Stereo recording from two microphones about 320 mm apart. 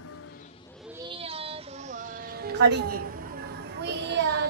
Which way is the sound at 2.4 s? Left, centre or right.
Right.